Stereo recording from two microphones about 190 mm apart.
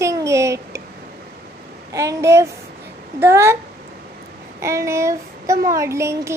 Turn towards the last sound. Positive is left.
turn(degrees=-15)  # may be behind; listen again after turning